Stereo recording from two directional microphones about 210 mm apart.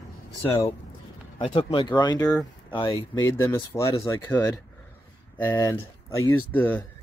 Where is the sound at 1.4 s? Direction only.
30° left (ahead or behind).